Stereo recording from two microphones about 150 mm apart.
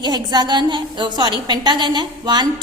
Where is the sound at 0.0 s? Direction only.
30° right (ahead or behind).